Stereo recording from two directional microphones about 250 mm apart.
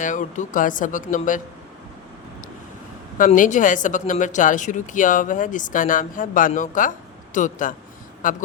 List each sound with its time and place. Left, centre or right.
0.0 s speech: left
3.2 s speech: left